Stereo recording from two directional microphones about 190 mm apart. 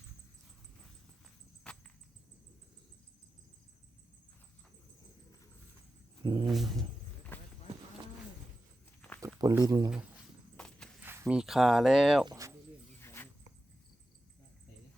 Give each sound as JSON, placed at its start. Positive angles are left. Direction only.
{"t": 6.2, "sound": "speech", "side_deg": -25}
{"t": 7.3, "sound": "clip-clop", "side_deg": 10}
{"t": 9.0, "sound": "a sound", "side_deg": 10}
{"t": 9.2, "sound": "speech", "side_deg": -20}
{"t": 10.6, "sound": "walk", "side_deg": 5}
{"t": 11.0, "sound": "speech", "side_deg": -10}
{"t": 12.2, "sound": "cricket", "side_deg": -20}
{"t": 13.0, "sound": "a sound", "side_deg": 15}